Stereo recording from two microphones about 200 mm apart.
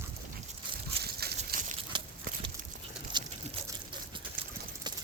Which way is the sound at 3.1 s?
20° right (ahead or behind).